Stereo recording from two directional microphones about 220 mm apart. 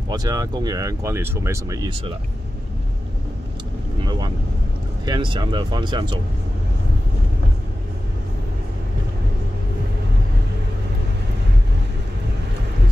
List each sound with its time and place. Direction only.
0.1 s speech: 15° right (ahead or behind)
4.0 s vehicle: 20° right (ahead or behind)
5.0 s speech: 20° right (ahead or behind)